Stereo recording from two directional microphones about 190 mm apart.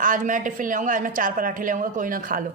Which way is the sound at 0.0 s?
45° right (ahead or behind).